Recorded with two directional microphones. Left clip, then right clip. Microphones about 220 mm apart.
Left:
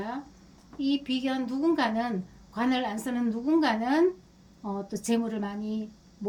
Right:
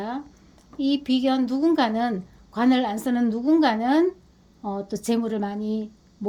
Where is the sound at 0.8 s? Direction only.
50° right (ahead or behind).